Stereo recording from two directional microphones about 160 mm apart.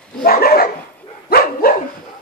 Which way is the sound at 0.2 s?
70° left (ahead or behind).